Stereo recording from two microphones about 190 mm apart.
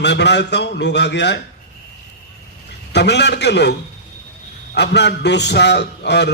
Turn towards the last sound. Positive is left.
turn(degrees=65)  # may be behind; listen again after turning